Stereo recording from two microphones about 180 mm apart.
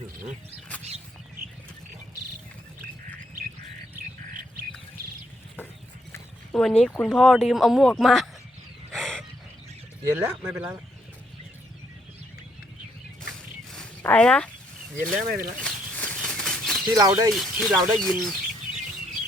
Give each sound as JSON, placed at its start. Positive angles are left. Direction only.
{"t": 6.1, "sound": "horse", "side_deg": 15}
{"t": 6.6, "sound": "speech", "side_deg": 5}
{"t": 8.9, "sound": "a sound", "side_deg": 5}
{"t": 10.2, "sound": "speech", "side_deg": -10}
{"t": 13.7, "sound": "a sound", "side_deg": 10}
{"t": 15.0, "sound": "speech", "side_deg": 5}
{"t": 15.6, "sound": "a sound", "side_deg": 5}
{"t": 16.9, "sound": "speech", "side_deg": -20}
{"t": 17.3, "sound": "speech", "side_deg": 0}